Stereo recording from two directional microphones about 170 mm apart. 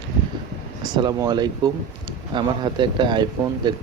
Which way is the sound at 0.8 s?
25° right (ahead or behind).